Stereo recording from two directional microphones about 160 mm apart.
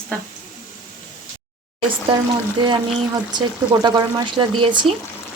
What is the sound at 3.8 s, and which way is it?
Speech, 30° right (ahead or behind).